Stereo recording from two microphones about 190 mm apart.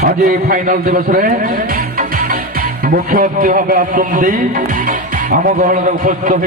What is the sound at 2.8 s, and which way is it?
A man's voice, 50° right (ahead or behind).